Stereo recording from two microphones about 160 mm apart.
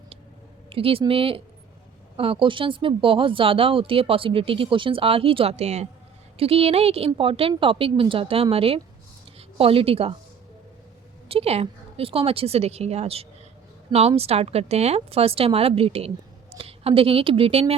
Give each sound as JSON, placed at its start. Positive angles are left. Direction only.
{"t": 0.7, "sound": "speech", "side_deg": -35}
{"t": 11.3, "sound": "speech", "side_deg": -40}